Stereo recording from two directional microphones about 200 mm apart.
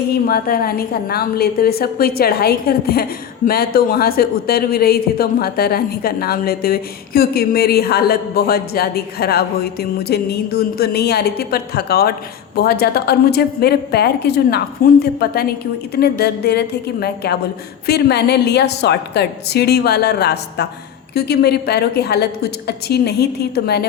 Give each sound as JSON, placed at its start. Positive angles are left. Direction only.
{"t": 0.1, "sound": "a woman's voice", "side_deg": 50}